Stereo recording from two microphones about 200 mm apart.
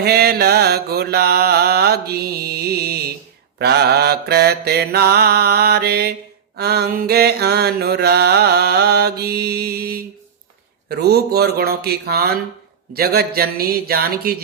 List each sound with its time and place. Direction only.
0.0 s mantra: 50° right (ahead or behind)